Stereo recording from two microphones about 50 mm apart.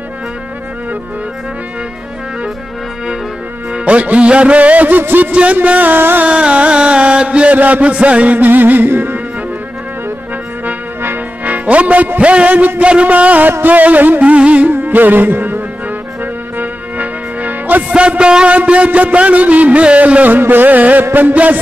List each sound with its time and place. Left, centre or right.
3.7 s music: right
5.3 s music: right
5.9 s music: right
6.2 s music: right
11.4 s music: right
14.7 s music: right
16.5 s music: right
17.9 s music: right
20.3 s music: right